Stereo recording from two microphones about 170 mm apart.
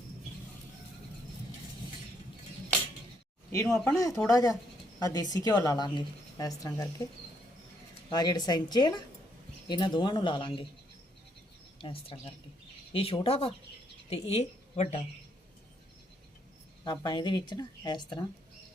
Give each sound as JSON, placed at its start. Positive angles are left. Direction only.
{"t": 3.5, "sound": "a woman's voice", "side_deg": 15}
{"t": 8.1, "sound": "a woman's voice", "side_deg": 25}
{"t": 11.8, "sound": "a woman's voice", "side_deg": 30}
{"t": 16.8, "sound": "a woman's voice", "side_deg": 25}